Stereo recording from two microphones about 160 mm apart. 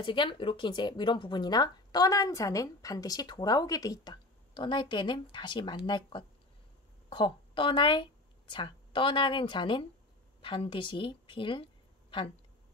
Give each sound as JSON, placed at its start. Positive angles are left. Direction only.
{"t": 0.0, "sound": "a woman's voice", "side_deg": 30}